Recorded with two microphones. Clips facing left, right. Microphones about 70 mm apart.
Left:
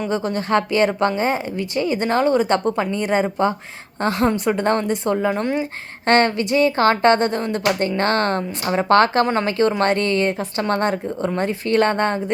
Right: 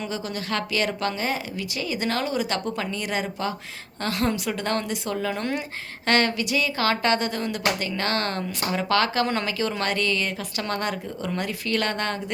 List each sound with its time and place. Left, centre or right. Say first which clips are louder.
0.1 s a woman's voice: left 9 dB; left